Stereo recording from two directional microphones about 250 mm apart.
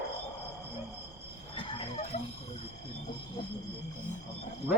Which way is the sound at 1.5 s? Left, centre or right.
Left.